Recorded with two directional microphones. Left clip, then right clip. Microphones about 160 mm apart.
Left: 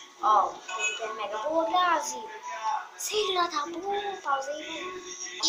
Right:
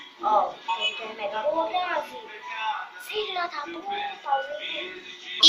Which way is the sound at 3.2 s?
80° left.